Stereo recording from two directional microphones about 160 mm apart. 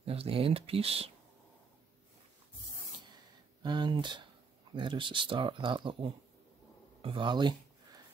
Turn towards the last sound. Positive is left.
turn(degrees=-30)  # may be behind; listen again after turning